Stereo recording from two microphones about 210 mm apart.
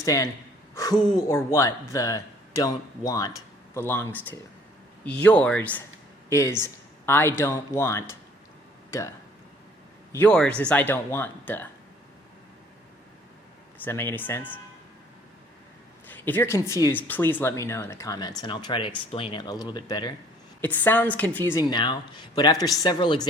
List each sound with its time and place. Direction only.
0.0 s a woman's voice: 15° left (ahead or behind)
13.8 s speech: 10° left (ahead or behind)
16.0 s speech: 10° left (ahead or behind)
20.6 s speech: 10° left (ahead or behind)